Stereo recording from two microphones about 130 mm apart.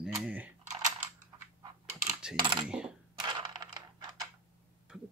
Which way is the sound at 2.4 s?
40° right (ahead or behind).